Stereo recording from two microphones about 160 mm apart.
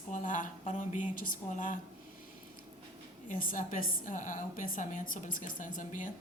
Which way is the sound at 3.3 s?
55° left (ahead or behind).